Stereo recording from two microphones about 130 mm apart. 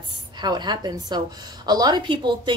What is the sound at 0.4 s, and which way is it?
A woman's voice, 35° right (ahead or behind).